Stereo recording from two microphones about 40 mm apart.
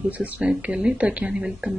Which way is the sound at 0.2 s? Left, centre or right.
Right.